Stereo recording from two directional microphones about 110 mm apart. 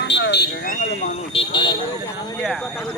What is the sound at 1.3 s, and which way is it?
Vehicle, 45° left (ahead or behind).